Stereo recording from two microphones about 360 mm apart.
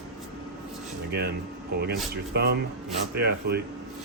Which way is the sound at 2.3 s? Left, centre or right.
Right.